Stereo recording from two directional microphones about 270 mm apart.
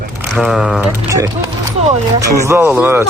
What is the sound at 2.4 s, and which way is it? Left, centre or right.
Speech, centre.